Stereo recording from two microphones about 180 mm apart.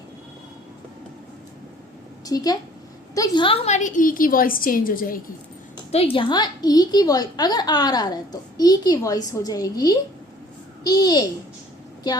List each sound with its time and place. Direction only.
2.2 s a woman's voice: 20° left (ahead or behind); by 5.2 s 50° left (ahead or behind)
5.9 s a woman's voice: 30° left (ahead or behind)